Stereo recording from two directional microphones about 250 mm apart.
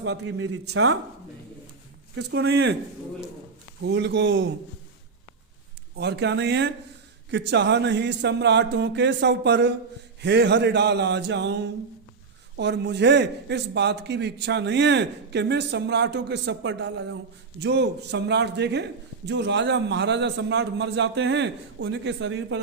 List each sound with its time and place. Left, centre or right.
0.0 s a man's voice: right
2.3 s speech: right
3.8 s a man's voice: right
6.0 s a man's voice: right